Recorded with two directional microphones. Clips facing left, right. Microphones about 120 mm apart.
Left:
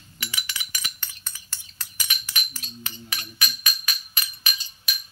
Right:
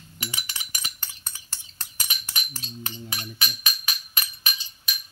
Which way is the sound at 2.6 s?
30° right (ahead or behind).